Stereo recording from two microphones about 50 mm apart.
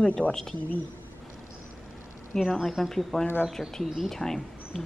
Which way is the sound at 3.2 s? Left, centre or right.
Left.